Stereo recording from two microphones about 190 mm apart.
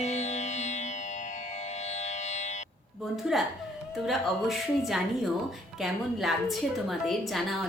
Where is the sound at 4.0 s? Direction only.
Centre (ahead or behind).